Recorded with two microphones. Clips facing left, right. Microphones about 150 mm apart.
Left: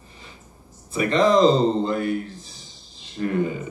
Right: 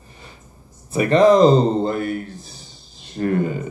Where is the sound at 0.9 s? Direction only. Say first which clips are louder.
Right 5 dB; 50° right (ahead or behind).